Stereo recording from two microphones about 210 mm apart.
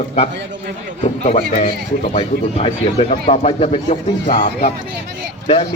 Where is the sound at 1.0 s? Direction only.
30° left (ahead or behind).